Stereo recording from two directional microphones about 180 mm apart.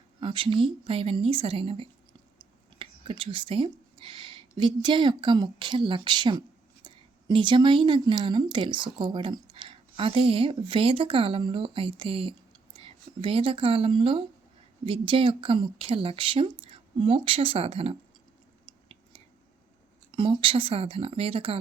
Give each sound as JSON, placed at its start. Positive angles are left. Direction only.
{"t": 0.2, "sound": "a woman's voice", "side_deg": -30}
{"t": 20.1, "sound": "speech", "side_deg": -30}